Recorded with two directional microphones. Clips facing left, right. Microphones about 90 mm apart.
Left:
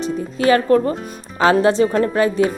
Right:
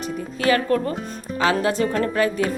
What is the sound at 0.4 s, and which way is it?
Speech, 30° left (ahead or behind).